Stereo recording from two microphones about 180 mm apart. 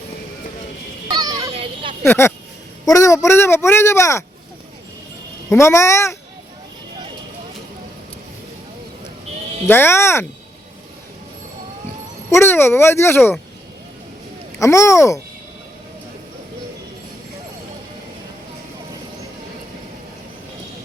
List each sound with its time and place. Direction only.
1.2 s a sound: 20° right (ahead or behind)
1.5 s vehicle: 30° right (ahead or behind)
2.0 s speech: 15° left (ahead or behind)
5.5 s speech: 15° left (ahead or behind)
9.6 s speech: 10° left (ahead or behind)
12.3 s speech: 15° left (ahead or behind)
14.6 s speech: 15° left (ahead or behind)